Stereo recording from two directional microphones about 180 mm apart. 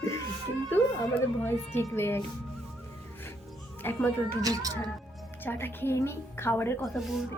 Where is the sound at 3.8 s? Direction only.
10° left (ahead or behind).